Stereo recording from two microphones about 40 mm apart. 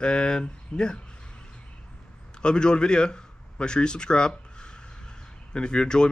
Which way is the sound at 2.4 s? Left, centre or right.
Left.